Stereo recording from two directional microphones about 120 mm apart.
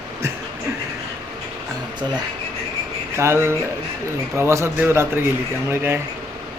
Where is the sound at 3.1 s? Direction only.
20° right (ahead or behind).